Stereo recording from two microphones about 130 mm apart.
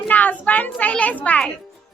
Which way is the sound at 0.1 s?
10° left (ahead or behind).